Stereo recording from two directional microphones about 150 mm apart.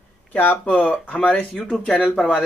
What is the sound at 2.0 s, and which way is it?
Speech, 5° right (ahead or behind).